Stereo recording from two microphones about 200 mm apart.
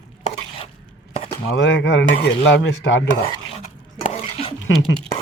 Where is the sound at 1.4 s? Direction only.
70° left (ahead or behind).